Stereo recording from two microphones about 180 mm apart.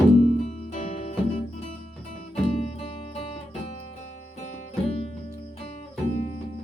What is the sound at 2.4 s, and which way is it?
Music, 35° left (ahead or behind).